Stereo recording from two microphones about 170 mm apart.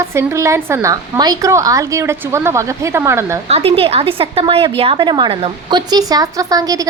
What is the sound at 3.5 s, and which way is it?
A woman's voice, 35° right (ahead or behind).